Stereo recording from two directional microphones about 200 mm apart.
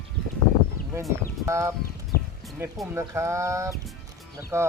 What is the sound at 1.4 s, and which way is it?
Speech, 15° right (ahead or behind).